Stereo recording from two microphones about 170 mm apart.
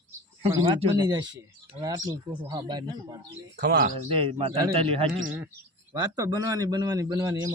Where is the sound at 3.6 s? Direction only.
60° right (ahead or behind).